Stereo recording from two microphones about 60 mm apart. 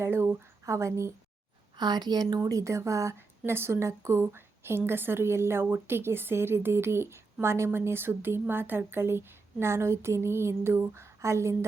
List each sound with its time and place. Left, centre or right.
0.0 s speech: right
0.6 s a woman's voice: right
2.4 s a woman's voice: right